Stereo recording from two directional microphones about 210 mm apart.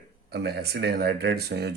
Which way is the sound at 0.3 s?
50° right (ahead or behind).